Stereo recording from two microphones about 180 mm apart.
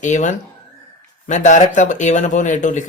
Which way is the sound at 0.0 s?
40° left (ahead or behind).